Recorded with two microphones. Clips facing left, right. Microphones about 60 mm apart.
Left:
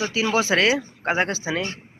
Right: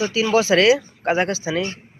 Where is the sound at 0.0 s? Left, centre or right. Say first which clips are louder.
Right 4 dB; left.